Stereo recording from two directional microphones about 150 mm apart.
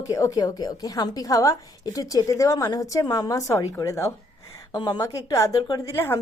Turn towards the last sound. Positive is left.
turn(degrees=15)  # may be behind; listen again after turning